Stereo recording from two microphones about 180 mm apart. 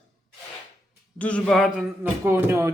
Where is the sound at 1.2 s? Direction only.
5° left (ahead or behind).